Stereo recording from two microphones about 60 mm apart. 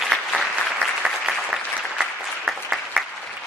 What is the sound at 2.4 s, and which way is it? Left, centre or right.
Applause, centre.